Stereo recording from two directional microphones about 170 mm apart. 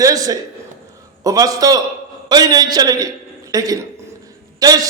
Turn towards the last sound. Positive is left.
turn(degrees=-20)  # may be behind; listen again after turning